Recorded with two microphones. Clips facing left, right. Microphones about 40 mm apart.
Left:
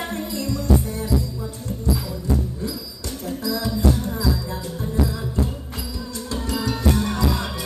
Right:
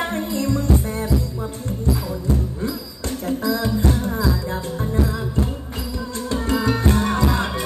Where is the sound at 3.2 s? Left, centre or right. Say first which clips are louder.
Right 4 dB; right.